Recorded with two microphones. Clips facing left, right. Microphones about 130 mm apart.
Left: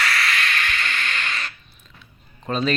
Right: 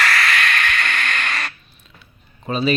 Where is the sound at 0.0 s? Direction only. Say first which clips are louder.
Right 4 dB; 85° right; by 1.5 s 70° right (ahead or behind).